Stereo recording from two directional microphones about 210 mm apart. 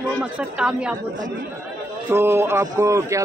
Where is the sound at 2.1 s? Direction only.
10° right (ahead or behind).